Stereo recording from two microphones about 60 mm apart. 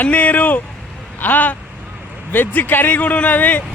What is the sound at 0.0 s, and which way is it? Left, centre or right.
Speech, left.